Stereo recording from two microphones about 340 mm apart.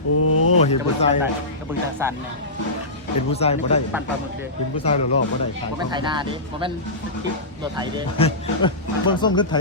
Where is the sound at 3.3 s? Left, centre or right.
Centre.